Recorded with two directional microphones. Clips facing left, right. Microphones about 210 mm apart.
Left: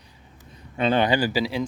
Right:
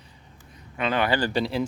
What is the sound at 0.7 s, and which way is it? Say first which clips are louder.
Speech: left 4 dB; 30° left (ahead or behind).